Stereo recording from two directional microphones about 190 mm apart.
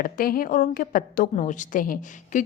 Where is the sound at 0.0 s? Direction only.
50° left (ahead or behind).